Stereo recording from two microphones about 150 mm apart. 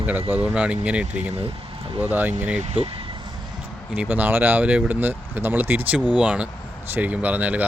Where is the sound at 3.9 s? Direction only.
10° right (ahead or behind).